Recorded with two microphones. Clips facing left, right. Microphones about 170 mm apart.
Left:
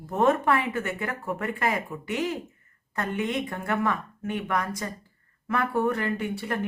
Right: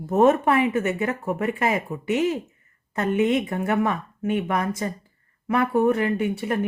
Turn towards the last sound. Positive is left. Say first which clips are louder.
# right 5 dB
turn(degrees=-20)  # may be behind; listen again after turning